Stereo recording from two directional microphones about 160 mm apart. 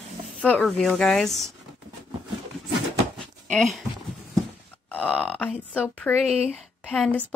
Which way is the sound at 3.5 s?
Centre (ahead or behind).